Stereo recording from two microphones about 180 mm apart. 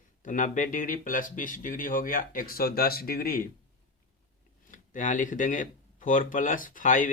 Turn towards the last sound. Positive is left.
turn(degrees=45)  # may be behind; listen again after turning